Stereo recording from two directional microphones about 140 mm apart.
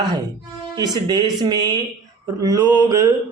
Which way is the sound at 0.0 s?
30° right (ahead or behind).